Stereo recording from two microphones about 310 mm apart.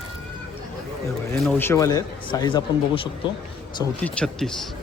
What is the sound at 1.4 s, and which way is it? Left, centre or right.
A man's voice, centre.